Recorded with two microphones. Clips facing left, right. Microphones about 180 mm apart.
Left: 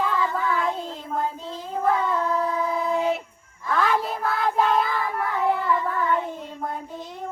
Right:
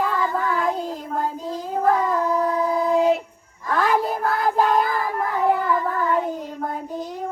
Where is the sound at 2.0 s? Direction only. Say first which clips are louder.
Right 3 dB; 10° right (ahead or behind).